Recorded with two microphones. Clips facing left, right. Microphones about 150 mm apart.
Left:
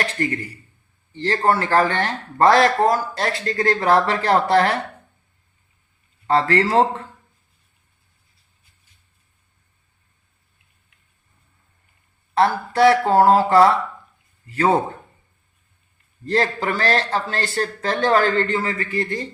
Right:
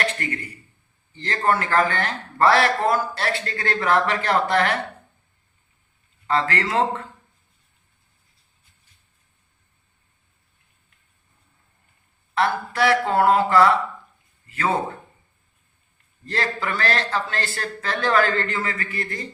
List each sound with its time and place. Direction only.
0.0 s speech: 35° left (ahead or behind)
6.2 s speech: 35° left (ahead or behind)
12.3 s speech: 35° left (ahead or behind)
16.2 s speech: 35° left (ahead or behind)